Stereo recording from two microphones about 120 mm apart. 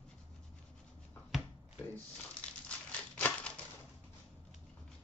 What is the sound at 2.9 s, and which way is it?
Crumpling, 10° left (ahead or behind).